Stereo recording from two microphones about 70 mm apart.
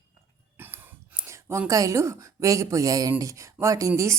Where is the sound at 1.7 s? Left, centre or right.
Right.